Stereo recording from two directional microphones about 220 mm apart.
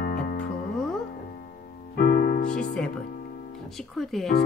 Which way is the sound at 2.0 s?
40° left (ahead or behind).